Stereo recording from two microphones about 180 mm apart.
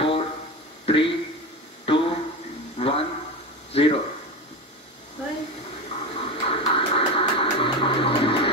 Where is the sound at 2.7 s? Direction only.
30° left (ahead or behind).